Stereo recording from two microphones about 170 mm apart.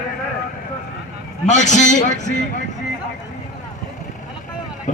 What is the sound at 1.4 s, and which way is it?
Speech, 45° left (ahead or behind).